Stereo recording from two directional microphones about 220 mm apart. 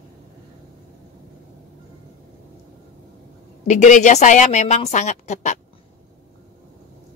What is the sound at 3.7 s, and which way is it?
Speech, 35° left (ahead or behind).